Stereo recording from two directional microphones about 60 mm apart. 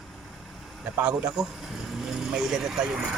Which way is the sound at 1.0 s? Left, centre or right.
Centre.